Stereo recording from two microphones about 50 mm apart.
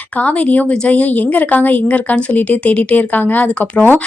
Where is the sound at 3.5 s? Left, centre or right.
Left.